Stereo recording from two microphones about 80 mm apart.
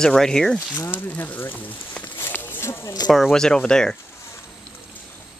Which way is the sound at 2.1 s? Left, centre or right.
Left.